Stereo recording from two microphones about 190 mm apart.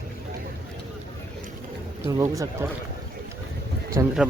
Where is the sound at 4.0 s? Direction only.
15° right (ahead or behind).